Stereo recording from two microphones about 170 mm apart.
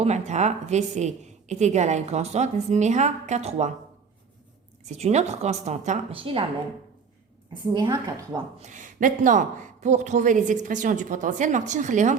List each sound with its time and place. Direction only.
0.0 s a woman's voice: 40° right (ahead or behind)
4.9 s a woman's voice: 40° right (ahead or behind)
7.5 s a woman's voice: 30° right (ahead or behind)
8.5 s a woman's voice: 45° right (ahead or behind)